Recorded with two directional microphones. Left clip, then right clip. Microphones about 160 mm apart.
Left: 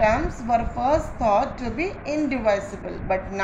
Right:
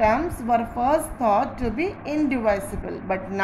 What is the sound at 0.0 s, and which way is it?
A woman's voice, 40° right (ahead or behind).